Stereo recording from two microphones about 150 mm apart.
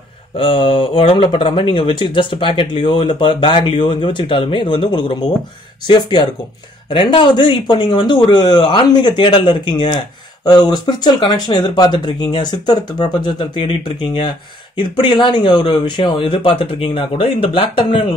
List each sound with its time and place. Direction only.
0.4 s speech: 35° left (ahead or behind)